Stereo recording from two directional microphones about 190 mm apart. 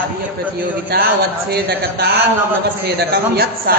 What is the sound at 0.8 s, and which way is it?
Speech, 55° right (ahead or behind).